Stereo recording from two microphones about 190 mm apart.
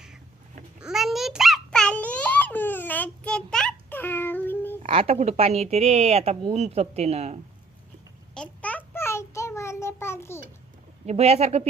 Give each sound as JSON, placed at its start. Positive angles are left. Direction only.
{"t": 0.8, "sound": "babbling", "side_deg": 0}
{"t": 4.8, "sound": "a woman's voice", "side_deg": -30}
{"t": 8.4, "sound": "child singing", "side_deg": 10}
{"t": 11.0, "sound": "a woman's voice", "side_deg": -35}